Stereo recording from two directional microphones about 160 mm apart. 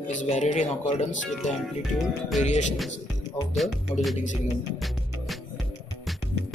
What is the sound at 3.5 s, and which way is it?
Speech, centre (ahead or behind).